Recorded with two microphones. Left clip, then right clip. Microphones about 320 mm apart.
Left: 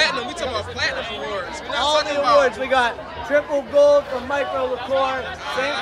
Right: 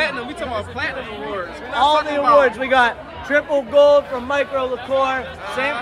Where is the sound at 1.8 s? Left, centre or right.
Centre.